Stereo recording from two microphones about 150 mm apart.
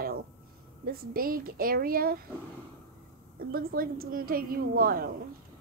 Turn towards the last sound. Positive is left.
turn(degrees=-80)